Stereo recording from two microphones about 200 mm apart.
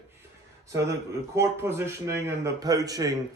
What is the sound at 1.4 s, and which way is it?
Speech, 10° right (ahead or behind).